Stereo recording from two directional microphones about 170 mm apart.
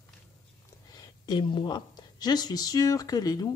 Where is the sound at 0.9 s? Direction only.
25° left (ahead or behind).